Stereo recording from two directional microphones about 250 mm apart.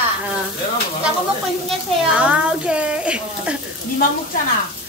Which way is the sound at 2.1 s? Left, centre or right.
Centre.